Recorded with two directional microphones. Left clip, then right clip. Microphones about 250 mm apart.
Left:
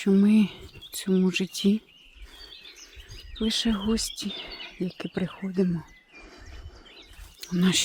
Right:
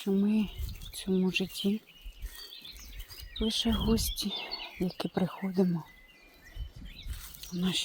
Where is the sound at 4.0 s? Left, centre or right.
Centre.